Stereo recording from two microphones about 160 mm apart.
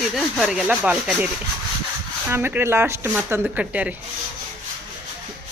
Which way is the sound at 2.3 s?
15° right (ahead or behind).